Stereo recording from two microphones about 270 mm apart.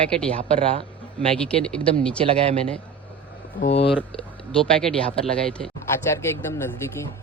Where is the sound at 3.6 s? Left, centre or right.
Left.